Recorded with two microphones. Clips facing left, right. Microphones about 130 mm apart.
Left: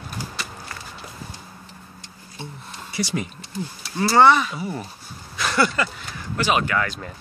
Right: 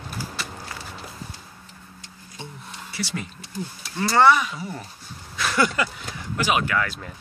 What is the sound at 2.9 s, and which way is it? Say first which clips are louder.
Speech: left 5 dB; 15° left (ahead or behind).